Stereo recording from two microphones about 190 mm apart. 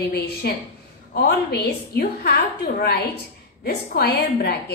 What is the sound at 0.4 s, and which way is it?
A woman's voice, 55° left (ahead or behind).